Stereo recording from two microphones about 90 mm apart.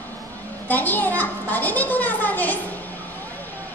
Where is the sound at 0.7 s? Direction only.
20° left (ahead or behind).